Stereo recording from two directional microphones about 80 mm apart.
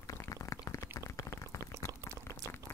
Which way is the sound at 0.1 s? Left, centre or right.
Left.